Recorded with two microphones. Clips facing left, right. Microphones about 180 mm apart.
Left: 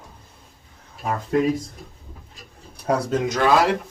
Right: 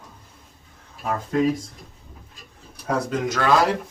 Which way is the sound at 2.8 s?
20° left (ahead or behind).